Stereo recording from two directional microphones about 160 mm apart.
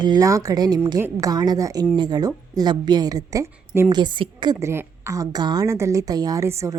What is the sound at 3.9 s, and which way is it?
Speech, 30° right (ahead or behind).